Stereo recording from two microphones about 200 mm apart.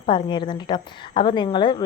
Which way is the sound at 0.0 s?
25° left (ahead or behind).